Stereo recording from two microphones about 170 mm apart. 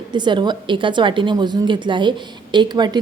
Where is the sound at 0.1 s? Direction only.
25° right (ahead or behind).